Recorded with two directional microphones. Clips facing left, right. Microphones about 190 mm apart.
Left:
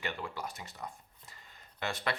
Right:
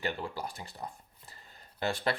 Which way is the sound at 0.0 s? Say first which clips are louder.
Right 3 dB; 30° right (ahead or behind).